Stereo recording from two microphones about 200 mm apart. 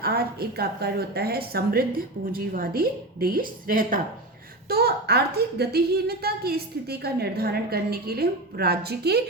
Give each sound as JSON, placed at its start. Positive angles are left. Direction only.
{"t": 0.0, "sound": "a woman's voice", "side_deg": -50}